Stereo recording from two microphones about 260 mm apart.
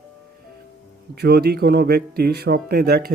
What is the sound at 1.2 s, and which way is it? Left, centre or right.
Speech, right.